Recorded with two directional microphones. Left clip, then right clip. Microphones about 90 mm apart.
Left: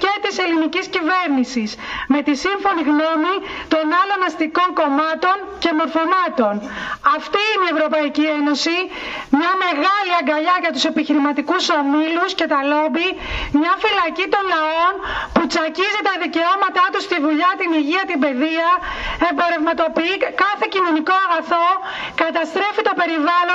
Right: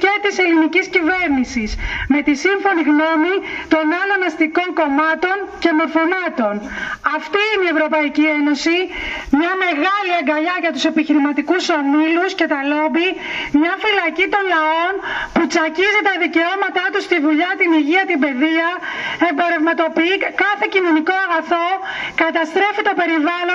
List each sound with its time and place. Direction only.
0.0 s a woman's voice: 15° left (ahead or behind)